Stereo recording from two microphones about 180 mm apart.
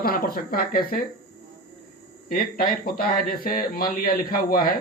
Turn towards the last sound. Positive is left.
turn(degrees=55)  # may be behind; listen again after turning